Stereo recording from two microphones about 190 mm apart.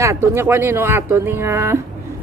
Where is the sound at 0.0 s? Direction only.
15° right (ahead or behind).